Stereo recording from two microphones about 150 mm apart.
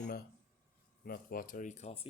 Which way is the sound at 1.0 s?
75° left (ahead or behind).